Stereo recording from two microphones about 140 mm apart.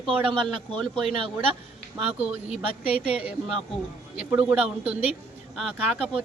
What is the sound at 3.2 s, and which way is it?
A woman's voice, 10° right (ahead or behind).